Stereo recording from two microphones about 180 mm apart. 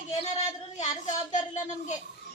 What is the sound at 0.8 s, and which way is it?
Speech, 45° left (ahead or behind).